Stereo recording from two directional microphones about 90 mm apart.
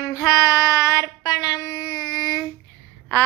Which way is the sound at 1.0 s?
45° left (ahead or behind).